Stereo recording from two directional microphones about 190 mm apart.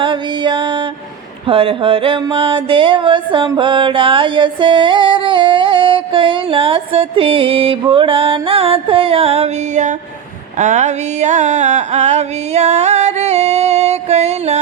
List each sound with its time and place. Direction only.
0.0 s music: 25° right (ahead or behind)